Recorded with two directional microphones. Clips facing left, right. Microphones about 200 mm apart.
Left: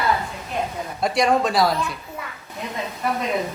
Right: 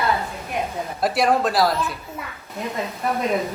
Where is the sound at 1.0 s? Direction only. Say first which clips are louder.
Even; 5° right (ahead or behind).